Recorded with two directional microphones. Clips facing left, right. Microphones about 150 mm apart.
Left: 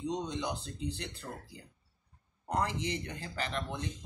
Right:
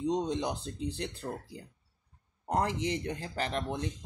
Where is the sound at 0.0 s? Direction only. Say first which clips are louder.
Right 5 dB; 45° right (ahead or behind).